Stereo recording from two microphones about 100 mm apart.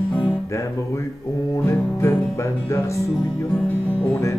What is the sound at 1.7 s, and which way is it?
Music, 25° left (ahead or behind).